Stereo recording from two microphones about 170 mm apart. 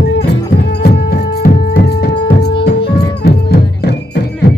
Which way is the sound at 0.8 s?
65° left (ahead or behind).